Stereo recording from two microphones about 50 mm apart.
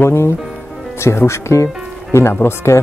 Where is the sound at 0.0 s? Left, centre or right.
Left.